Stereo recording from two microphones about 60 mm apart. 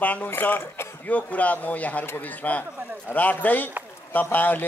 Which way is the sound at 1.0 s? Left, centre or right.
Left.